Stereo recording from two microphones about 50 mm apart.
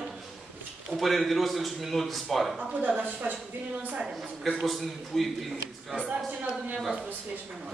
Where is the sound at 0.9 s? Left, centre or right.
Centre.